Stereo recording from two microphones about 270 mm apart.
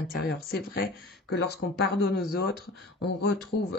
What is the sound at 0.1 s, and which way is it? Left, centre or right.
Speech, left.